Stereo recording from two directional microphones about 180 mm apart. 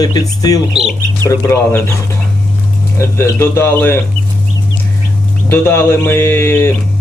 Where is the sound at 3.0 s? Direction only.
15° left (ahead or behind).